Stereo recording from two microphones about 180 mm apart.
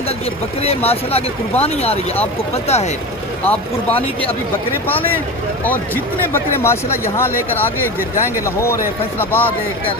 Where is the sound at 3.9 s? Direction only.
30° left (ahead or behind).